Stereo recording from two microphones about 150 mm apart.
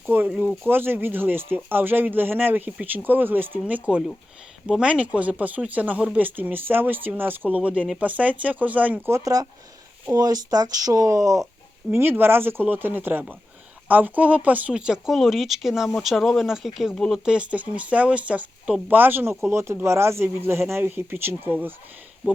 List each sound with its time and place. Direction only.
0.0 s speech: 15° right (ahead or behind)